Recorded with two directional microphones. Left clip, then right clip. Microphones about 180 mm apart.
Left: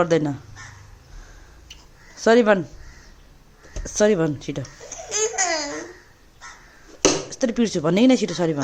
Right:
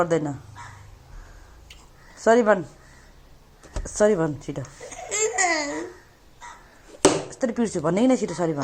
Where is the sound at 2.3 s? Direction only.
35° left (ahead or behind).